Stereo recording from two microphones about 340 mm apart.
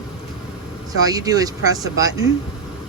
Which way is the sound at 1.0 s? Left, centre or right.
Centre.